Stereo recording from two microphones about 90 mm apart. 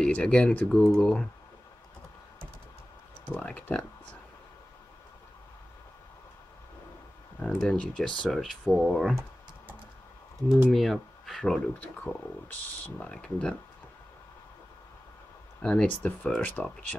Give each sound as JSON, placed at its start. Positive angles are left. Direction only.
{"t": 0.0, "sound": "speech", "side_deg": 10}
{"t": 3.3, "sound": "speech", "side_deg": 15}
{"t": 7.4, "sound": "speech", "side_deg": 10}
{"t": 10.7, "sound": "speech", "side_deg": 0}
{"t": 12.0, "sound": "speech", "side_deg": 15}
{"t": 15.6, "sound": "speech", "side_deg": 15}